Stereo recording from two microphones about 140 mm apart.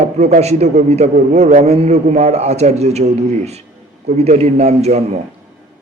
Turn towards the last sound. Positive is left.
turn(degrees=-50)  # may be behind; listen again after turning